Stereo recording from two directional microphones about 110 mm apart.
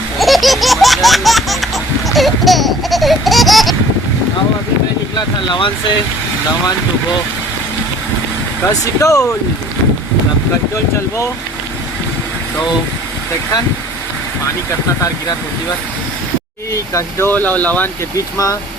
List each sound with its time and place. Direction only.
0.2 s baby laughter: centre (ahead or behind)
5.1 s speech: 45° left (ahead or behind)
8.6 s speech: 30° left (ahead or behind)
16.7 s speech: 25° left (ahead or behind)